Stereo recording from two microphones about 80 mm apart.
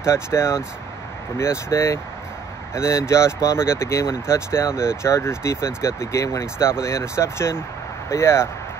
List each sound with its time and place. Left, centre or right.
0.0 s speech: left